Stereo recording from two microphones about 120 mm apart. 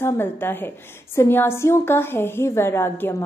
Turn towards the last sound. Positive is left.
turn(degrees=20)  # may be behind; listen again after turning